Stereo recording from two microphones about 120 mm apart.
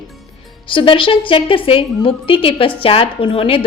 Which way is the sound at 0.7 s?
45° left (ahead or behind).